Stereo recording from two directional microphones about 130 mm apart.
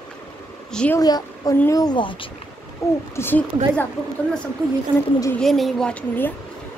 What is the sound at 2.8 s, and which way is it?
A woman's voice, 20° left (ahead or behind).